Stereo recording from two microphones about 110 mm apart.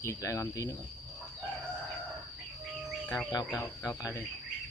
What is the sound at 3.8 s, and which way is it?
Speech, 35° left (ahead or behind).